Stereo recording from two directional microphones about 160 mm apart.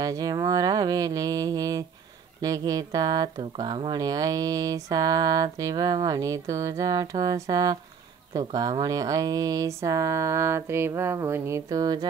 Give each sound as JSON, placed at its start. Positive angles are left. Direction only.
{"t": 0.0, "sound": "speech", "side_deg": -25}